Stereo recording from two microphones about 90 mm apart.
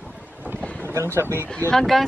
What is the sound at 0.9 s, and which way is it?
Speech, 30° right (ahead or behind).